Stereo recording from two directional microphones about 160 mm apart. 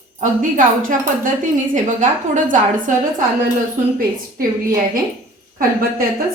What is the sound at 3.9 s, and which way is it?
A woman's voice, 60° right (ahead or behind).